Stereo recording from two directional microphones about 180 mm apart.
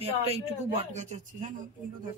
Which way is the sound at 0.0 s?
35° right (ahead or behind).